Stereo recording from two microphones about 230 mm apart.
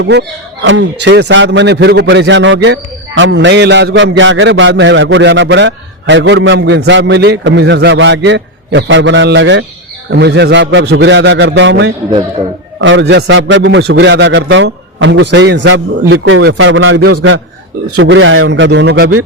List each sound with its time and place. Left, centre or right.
0.0 s a man's voice: right
17.9 s a man's voice: right